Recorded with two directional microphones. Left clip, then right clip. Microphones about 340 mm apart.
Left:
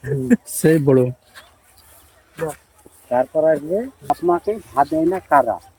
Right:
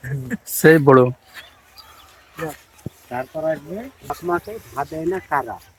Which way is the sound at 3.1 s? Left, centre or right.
Left.